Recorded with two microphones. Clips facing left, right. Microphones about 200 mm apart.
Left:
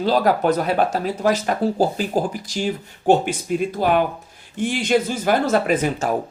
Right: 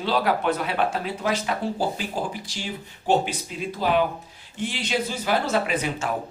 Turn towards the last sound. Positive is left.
turn(degrees=45)  # may be behind; listen again after turning